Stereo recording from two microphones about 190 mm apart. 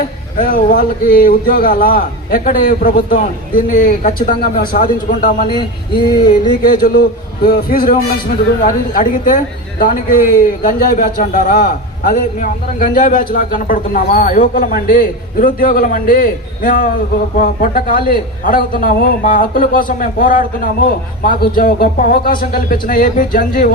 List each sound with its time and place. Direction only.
0.3 s a woman's voice: 45° left (ahead or behind)
5.5 s a sound: 25° left (ahead or behind)
6.6 s a woman's voice: 45° left (ahead or behind)